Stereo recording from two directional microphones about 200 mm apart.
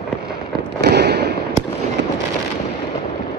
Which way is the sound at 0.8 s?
55° right (ahead or behind).